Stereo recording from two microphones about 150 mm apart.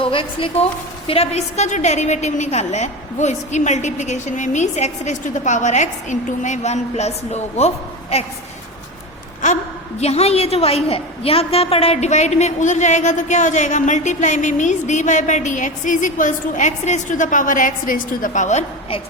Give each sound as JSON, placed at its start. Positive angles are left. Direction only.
{"t": 0.0, "sound": "a woman's voice", "side_deg": 35}
{"t": 10.0, "sound": "a woman's voice", "side_deg": 45}